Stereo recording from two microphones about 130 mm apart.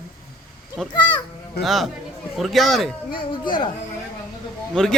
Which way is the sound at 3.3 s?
35° left (ahead or behind).